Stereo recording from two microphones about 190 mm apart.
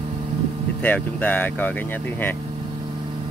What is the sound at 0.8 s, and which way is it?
Speech, 10° left (ahead or behind).